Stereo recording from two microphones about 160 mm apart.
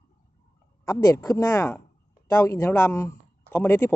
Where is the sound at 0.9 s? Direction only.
20° left (ahead or behind).